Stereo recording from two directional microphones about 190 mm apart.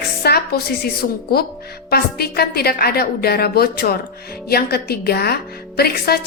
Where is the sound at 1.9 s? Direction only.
55° left (ahead or behind).